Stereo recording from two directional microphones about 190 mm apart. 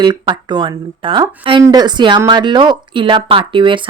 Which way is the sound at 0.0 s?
25° right (ahead or behind).